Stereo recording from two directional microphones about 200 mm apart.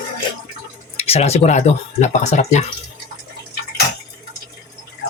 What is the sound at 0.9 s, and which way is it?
Speech, 30° left (ahead or behind).